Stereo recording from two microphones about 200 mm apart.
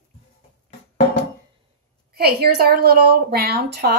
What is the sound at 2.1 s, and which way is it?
Speech, 50° right (ahead or behind).